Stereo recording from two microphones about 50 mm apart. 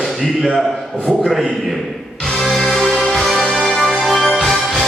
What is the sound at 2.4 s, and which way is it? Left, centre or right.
Music, centre.